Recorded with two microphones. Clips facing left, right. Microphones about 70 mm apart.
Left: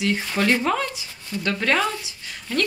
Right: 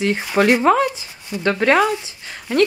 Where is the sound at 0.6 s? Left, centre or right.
Right.